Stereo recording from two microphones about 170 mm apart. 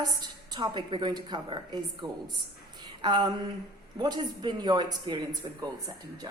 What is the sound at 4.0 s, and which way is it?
A woman's voice, 25° right (ahead or behind).